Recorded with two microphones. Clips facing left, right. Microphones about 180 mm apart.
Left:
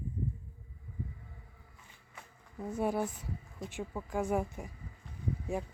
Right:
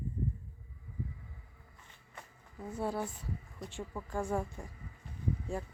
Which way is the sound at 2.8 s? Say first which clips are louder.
Left 3 dB; 15° left (ahead or behind).